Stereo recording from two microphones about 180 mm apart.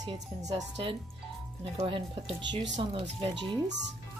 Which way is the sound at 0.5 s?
30° right (ahead or behind).